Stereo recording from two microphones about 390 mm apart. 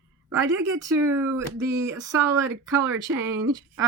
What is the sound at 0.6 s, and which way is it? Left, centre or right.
Speech, centre.